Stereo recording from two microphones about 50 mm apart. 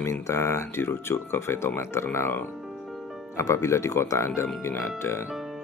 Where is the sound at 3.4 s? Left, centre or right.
Left.